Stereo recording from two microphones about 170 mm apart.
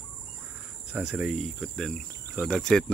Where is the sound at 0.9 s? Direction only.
5° right (ahead or behind).